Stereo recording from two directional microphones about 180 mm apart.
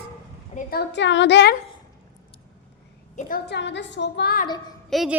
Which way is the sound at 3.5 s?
75° left (ahead or behind).